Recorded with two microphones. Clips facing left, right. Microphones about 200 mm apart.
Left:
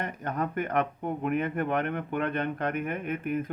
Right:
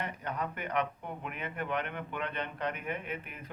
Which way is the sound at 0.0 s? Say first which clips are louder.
Left 5 dB; 45° left (ahead or behind).